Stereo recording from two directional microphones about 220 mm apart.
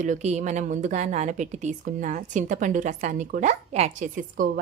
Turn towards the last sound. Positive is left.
turn(degrees=-40)  # may be behind; listen again after turning